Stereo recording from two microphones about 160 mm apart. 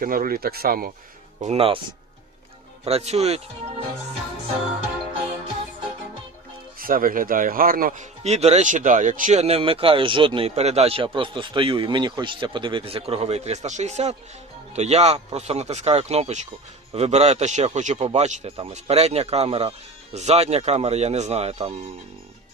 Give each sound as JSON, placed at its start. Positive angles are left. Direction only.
{"t": 0.0, "sound": "speech", "side_deg": -65}
{"t": 1.4, "sound": "speech", "side_deg": -40}
{"t": 2.8, "sound": "speech", "side_deg": -40}
{"t": 6.7, "sound": "a man's voice", "side_deg": -65}